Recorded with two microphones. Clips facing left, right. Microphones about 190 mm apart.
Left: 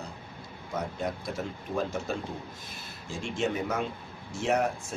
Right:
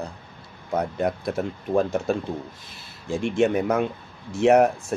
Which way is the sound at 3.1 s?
60° right (ahead or behind).